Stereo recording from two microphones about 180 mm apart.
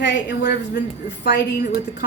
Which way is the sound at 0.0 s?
70° left (ahead or behind).